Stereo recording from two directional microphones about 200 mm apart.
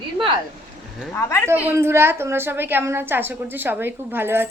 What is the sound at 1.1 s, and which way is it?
Speech, 15° left (ahead or behind).